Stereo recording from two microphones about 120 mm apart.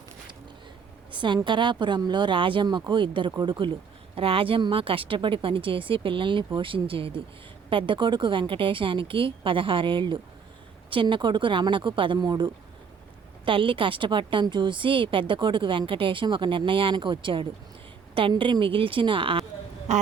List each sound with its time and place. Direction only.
1.1 s a sound: 40° right (ahead or behind)
1.5 s a woman's voice: 40° right (ahead or behind)
19.9 s a woman's voice: 75° right (ahead or behind)